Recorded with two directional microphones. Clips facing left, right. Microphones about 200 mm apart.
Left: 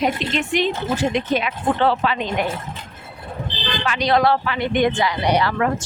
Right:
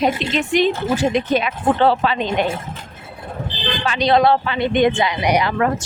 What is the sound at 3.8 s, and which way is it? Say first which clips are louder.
Speech: right 3 dB; 25° right (ahead or behind).